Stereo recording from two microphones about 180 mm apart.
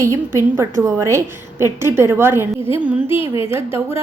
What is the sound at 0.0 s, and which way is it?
A woman's voice, 15° right (ahead or behind).